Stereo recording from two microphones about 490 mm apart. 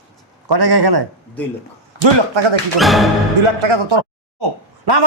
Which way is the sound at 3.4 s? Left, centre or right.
Right.